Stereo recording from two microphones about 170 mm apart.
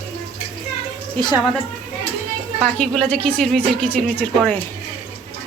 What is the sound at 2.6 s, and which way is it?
A woman's voice, 5° left (ahead or behind).